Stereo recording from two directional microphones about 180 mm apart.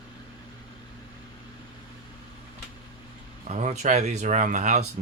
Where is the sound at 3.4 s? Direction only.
40° right (ahead or behind).